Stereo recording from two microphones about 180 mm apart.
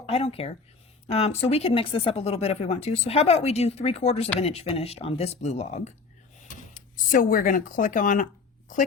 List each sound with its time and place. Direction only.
0.0 s speech: 30° left (ahead or behind)